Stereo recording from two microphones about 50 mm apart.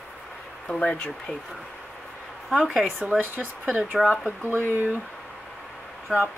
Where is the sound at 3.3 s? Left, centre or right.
Right.